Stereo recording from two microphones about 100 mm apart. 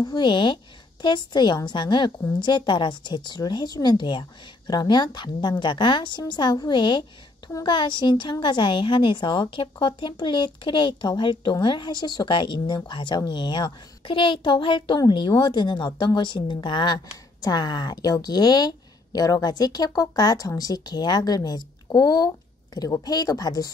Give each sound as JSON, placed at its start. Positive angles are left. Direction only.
{"t": 0.0, "sound": "a woman's voice", "side_deg": 50}
{"t": 23.0, "sound": "a woman's voice", "side_deg": 40}